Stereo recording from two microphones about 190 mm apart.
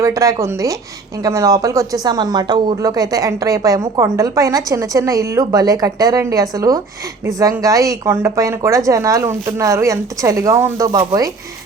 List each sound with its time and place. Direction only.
0.0 s speech: 15° right (ahead or behind)